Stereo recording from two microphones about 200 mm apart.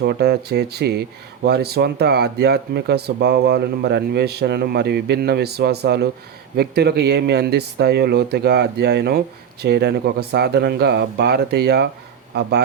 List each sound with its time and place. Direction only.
0.0 s speech: 55° right (ahead or behind)